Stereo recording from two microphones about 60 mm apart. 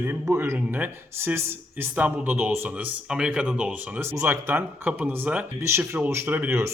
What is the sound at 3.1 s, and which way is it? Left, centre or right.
Speech, centre.